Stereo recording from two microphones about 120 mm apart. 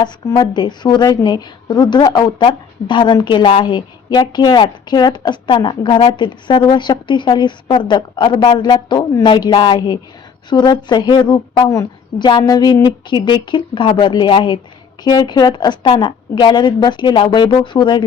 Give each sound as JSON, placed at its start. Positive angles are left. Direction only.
{"t": 0.3, "sound": "a woman's voice", "side_deg": 35}